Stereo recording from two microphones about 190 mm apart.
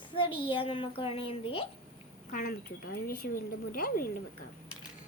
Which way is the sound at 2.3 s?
50° left (ahead or behind).